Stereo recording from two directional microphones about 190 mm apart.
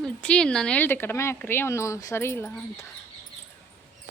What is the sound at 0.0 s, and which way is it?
Speech, 5° left (ahead or behind).